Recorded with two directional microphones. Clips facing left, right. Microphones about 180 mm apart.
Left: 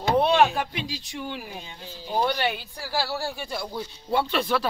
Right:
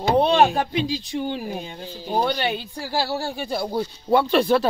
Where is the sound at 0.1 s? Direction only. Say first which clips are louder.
Right 3 dB; 30° right (ahead or behind).